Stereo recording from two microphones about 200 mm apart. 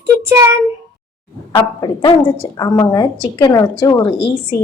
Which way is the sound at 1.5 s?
20° left (ahead or behind).